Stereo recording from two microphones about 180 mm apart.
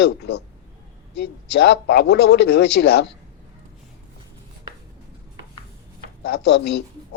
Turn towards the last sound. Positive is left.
turn(degrees=70)  # may be behind; listen again after turning